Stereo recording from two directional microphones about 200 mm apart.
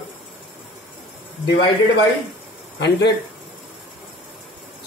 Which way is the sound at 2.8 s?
55° left (ahead or behind).